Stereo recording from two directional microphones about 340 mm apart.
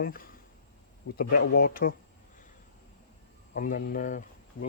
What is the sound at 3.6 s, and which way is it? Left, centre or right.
Speech, left.